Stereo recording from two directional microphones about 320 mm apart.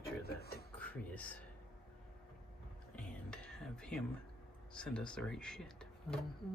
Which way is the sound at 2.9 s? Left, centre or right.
Centre.